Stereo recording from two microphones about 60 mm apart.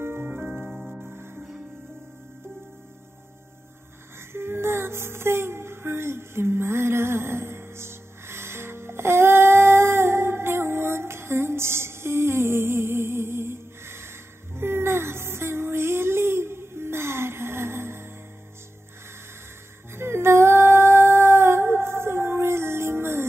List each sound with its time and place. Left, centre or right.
0.0 s music: right
0.7 s music: centre
1.1 s music: right
4.3 s music: right
19.9 s music: right